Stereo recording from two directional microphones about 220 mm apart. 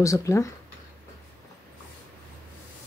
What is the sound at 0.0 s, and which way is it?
Speech, 15° left (ahead or behind).